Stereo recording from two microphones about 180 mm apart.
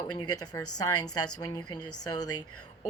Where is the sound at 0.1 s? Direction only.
20° left (ahead or behind).